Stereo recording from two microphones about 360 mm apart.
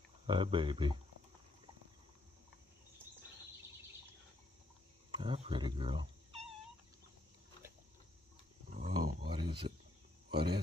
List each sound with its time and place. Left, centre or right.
0.3 s speech: centre
5.1 s speech: centre
8.7 s a sound: centre
10.3 s speech: right